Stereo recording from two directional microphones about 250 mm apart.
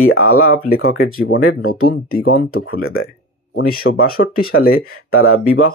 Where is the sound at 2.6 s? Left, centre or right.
Left.